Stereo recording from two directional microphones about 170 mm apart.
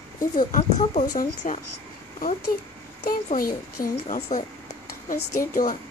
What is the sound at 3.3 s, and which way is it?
A woman's voice, 55° left (ahead or behind).